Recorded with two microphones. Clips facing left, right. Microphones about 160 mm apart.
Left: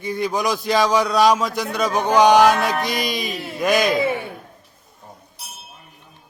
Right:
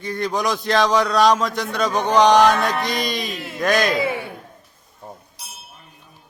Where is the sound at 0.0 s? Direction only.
10° left (ahead or behind).